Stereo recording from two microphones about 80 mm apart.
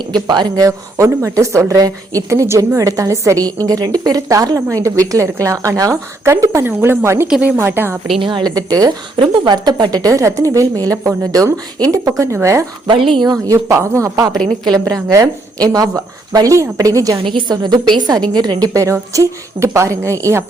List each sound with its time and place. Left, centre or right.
0.0 s a woman's voice: right
0.6 s a woman's voice: right
7.3 s a woman's voice: centre
7.5 s speech: right
8.2 s a woman's voice: right
8.5 s a woman's voice: right
9.3 s a woman's voice: right
12.9 s speech: right
13.3 s a woman's voice: right
14.3 s a woman's voice: centre
15.1 s a woman's voice: right
17.5 s a woman's voice: right
18.7 s speech: right